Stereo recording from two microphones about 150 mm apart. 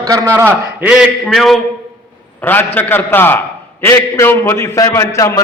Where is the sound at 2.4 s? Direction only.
15° left (ahead or behind).